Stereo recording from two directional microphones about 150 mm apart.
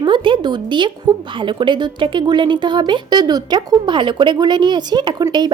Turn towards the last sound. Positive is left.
turn(degrees=-30)  # may be behind; listen again after turning